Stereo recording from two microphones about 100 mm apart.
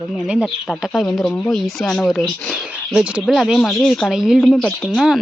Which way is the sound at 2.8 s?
10° right (ahead or behind).